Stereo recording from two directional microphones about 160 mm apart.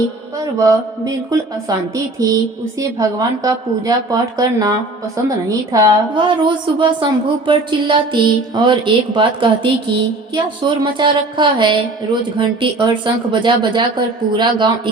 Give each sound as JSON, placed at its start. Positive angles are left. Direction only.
{"t": 0.3, "sound": "a woman's voice", "side_deg": -20}